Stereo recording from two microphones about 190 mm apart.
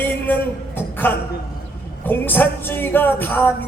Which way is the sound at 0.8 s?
10° left (ahead or behind).